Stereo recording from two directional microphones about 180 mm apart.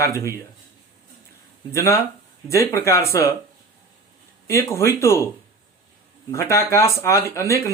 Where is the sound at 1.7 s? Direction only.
15° left (ahead or behind).